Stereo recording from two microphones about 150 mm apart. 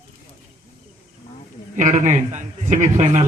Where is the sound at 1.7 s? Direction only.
55° right (ahead or behind).